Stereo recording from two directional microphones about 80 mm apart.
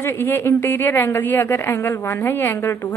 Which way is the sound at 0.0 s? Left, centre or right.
Left.